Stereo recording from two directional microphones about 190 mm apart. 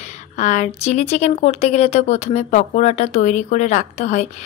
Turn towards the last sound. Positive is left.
turn(degrees=40)  # may be behind; listen again after turning